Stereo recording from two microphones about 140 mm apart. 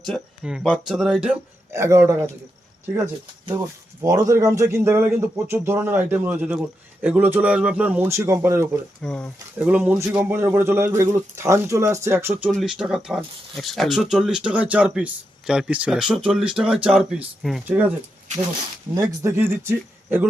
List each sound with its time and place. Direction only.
0.0 s speech: centre (ahead or behind)
1.7 s speech: 20° right (ahead or behind)
4.0 s speech: 25° right (ahead or behind)
9.0 s speech: 5° left (ahead or behind)
9.6 s speech: 10° right (ahead or behind)
12.5 s speech: centre (ahead or behind)
18.9 s speech: 20° right (ahead or behind)